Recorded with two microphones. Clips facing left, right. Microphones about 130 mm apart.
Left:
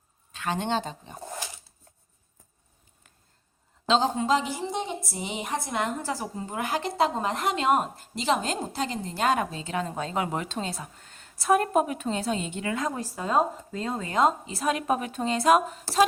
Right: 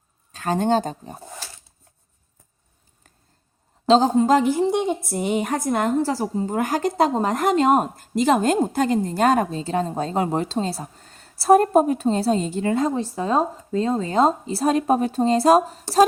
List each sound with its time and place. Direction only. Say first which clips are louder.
0.3 s a woman's voice: right 8 dB; 40° right (ahead or behind)
1.4 s a sound: left 1 dB; 15° left (ahead or behind)
3.8 s a woman's voice: right 8 dB; 40° right (ahead or behind)